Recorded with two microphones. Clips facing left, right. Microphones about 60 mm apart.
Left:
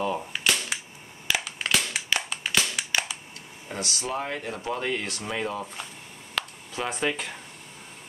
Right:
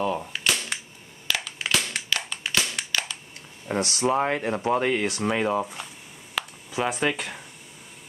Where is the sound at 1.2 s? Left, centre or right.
Centre.